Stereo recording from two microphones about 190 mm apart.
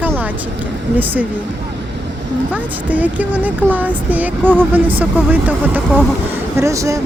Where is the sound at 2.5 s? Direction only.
10° right (ahead or behind).